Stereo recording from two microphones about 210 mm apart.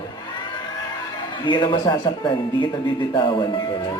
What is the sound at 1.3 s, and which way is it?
Speech, 20° left (ahead or behind).